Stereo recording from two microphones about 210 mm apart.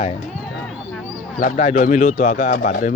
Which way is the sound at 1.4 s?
35° left (ahead or behind).